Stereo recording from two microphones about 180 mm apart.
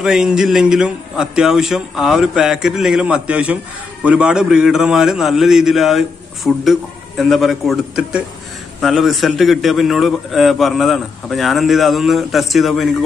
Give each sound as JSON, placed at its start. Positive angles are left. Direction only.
{"t": 0.0, "sound": "a man's voice", "side_deg": -5}